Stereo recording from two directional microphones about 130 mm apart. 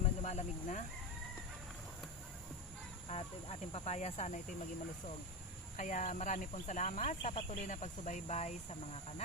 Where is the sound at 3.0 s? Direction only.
50° left (ahead or behind).